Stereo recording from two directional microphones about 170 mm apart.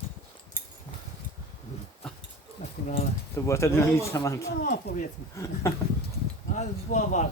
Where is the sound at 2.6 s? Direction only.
40° left (ahead or behind).